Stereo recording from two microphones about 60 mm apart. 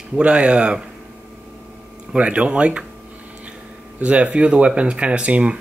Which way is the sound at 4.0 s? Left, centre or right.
Right.